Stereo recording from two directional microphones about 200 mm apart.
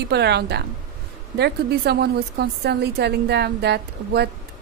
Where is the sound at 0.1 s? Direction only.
55° right (ahead or behind).